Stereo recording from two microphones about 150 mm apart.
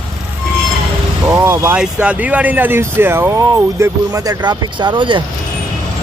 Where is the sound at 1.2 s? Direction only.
15° right (ahead or behind); by 5.2 s 35° right (ahead or behind).